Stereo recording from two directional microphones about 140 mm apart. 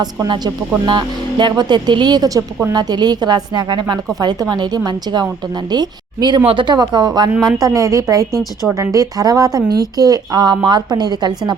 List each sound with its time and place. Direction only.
0.0 s a woman's voice: 30° right (ahead or behind)